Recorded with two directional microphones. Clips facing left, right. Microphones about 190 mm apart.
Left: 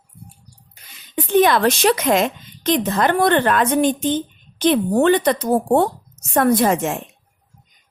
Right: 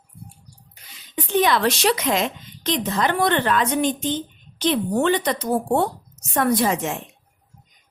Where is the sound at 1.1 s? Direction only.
50° left (ahead or behind).